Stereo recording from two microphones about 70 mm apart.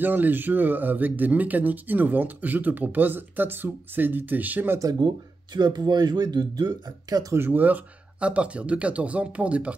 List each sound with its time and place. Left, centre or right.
0.0 s speech: right
5.0 s speech: right
7.1 s speech: right
7.3 s speech: right